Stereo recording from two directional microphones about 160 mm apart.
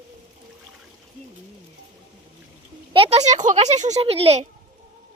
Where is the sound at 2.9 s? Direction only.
40° right (ahead or behind).